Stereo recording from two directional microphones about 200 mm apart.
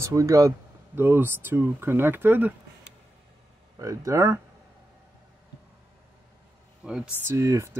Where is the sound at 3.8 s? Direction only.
15° right (ahead or behind).